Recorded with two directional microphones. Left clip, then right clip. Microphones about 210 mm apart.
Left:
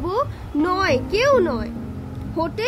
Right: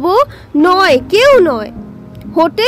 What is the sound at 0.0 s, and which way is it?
Speech, 40° right (ahead or behind).